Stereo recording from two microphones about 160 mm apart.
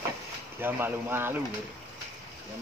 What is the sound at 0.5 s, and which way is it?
Speech, 15° right (ahead or behind).